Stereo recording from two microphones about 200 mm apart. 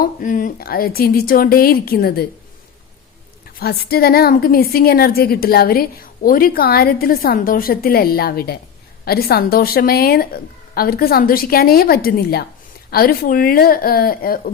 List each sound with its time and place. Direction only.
0.0 s a woman's voice: 45° left (ahead or behind)
3.6 s a woman's voice: 50° left (ahead or behind)